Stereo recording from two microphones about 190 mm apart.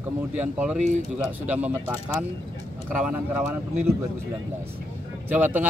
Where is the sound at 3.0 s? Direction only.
10° right (ahead or behind).